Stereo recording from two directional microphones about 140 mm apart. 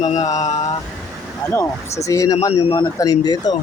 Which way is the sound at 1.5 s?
20° left (ahead or behind).